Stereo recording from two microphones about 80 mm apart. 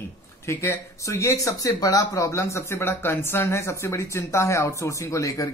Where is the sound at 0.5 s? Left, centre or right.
Left.